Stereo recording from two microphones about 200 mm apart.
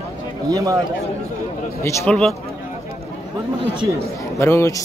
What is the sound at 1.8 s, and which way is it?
Speech, 5° left (ahead or behind).